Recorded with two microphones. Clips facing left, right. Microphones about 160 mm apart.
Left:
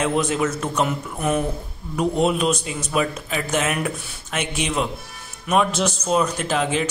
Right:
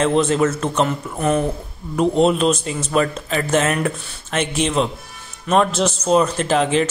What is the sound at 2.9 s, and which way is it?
Speech, 5° left (ahead or behind).